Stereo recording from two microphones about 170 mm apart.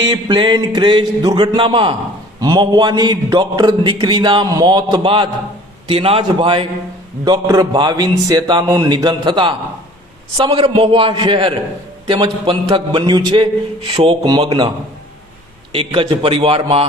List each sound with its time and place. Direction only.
0.0 s a man's voice: 25° right (ahead or behind)
15.7 s a man's voice: 30° right (ahead or behind)